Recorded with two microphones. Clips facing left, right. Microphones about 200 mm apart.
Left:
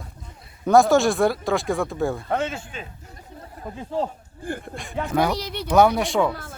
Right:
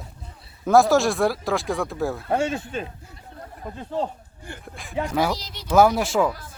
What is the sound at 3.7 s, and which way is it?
Speech, 10° left (ahead or behind).